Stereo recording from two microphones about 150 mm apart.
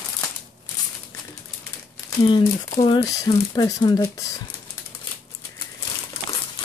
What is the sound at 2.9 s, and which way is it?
Speech, 25° left (ahead or behind).